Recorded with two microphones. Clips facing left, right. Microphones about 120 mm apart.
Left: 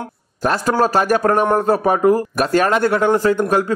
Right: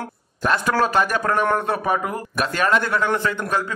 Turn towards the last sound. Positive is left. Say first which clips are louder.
# left 7 dB
turn(degrees=45)  # may be behind; listen again after turning